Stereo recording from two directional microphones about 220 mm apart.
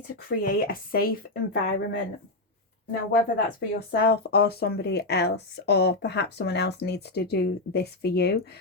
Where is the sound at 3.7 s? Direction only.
45° left (ahead or behind).